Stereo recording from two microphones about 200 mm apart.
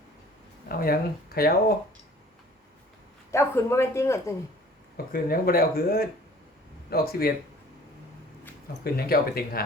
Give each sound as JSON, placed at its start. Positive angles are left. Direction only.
{"t": 0.7, "sound": "speech", "side_deg": 50}
{"t": 3.3, "sound": "speech", "side_deg": 15}
{"t": 5.1, "sound": "speech", "side_deg": 45}
{"t": 8.8, "sound": "speech", "side_deg": 50}